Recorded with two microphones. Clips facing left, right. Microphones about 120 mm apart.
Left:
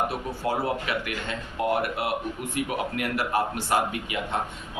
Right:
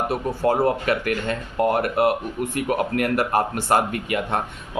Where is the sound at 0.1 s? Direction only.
50° right (ahead or behind).